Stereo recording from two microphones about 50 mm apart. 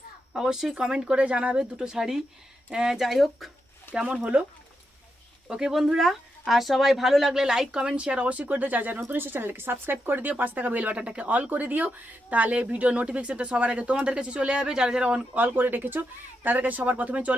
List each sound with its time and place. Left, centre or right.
0.3 s speech: centre
3.9 s speech: centre
5.5 s speech: centre; by 9.0 s right
9.0 s speech: right; by 15.2 s centre
15.4 s speech: right